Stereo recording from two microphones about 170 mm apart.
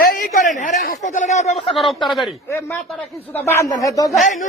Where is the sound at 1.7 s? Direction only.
Centre (ahead or behind).